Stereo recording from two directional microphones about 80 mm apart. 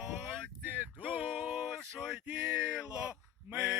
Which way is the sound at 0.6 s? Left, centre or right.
Right.